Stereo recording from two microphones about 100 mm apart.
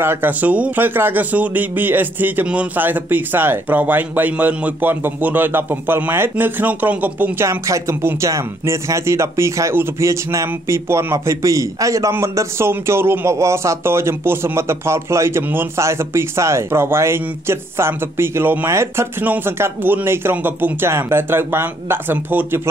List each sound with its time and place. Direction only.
0.0 s speech: 20° right (ahead or behind)